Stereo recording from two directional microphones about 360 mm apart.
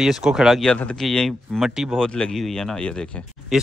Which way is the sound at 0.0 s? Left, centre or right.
Centre.